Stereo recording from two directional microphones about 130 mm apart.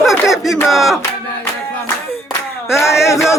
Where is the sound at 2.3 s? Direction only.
20° left (ahead or behind).